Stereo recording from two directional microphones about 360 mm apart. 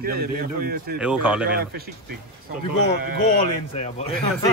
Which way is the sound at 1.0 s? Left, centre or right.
Centre.